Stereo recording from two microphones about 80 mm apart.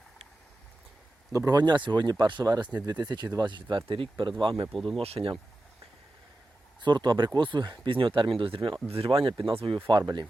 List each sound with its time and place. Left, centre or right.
1.3 s speech: right
1.5 s speech: right
2.4 s speech: right
2.8 s speech: right
3.4 s speech: right
4.7 s speech: centre
6.8 s speech: right
7.3 s speech: right
7.9 s speech: right